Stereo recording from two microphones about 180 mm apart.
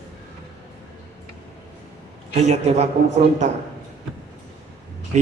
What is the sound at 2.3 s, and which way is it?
Speech, 40° right (ahead or behind).